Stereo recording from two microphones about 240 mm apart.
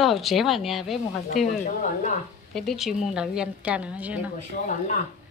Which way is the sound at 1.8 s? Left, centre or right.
Left.